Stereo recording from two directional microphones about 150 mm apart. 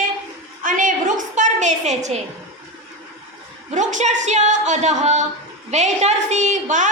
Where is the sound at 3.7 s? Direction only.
55° right (ahead or behind).